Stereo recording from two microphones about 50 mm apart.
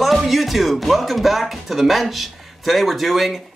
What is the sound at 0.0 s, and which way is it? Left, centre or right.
Speech, centre.